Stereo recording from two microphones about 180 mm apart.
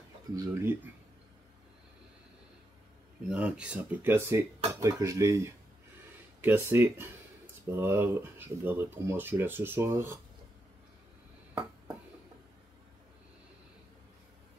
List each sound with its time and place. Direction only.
0.4 s speech: 15° right (ahead or behind)
3.3 s speech: 5° right (ahead or behind)